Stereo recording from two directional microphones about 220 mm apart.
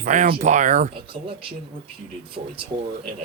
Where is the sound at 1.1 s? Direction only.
25° right (ahead or behind).